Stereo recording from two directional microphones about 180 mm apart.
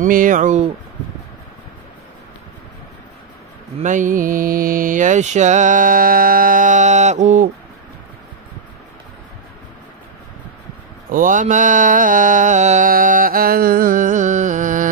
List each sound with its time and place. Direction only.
0.0 s mantra: 50° right (ahead or behind)
3.8 s mantra: 45° right (ahead or behind)
11.1 s mantra: 50° right (ahead or behind)